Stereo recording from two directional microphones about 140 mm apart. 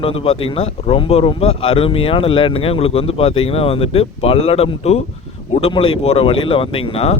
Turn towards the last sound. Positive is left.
turn(degrees=40)  # may be behind; listen again after turning